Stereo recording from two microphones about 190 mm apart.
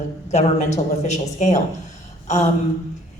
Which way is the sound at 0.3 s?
35° left (ahead or behind).